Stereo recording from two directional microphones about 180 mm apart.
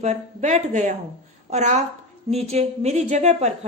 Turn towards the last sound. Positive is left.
turn(degrees=-40)  # may be behind; listen again after turning